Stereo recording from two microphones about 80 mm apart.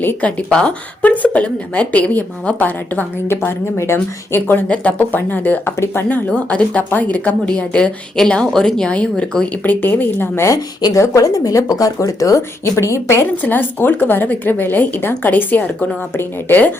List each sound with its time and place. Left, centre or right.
0.0 s a woman's voice: left
0.3 s a woman's voice: centre; by 6.1 s left
6.1 s speech: centre
9.6 s a woman's voice: left